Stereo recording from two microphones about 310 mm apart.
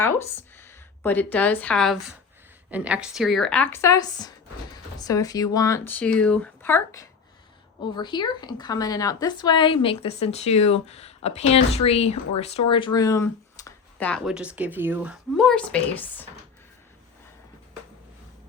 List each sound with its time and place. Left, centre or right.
0.0 s a woman's voice: centre